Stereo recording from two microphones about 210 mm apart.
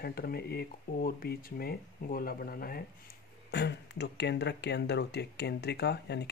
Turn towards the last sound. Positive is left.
turn(degrees=55)  # may be behind; listen again after turning